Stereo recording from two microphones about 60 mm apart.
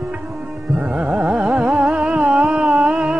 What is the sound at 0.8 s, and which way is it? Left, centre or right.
Carnatic music, right.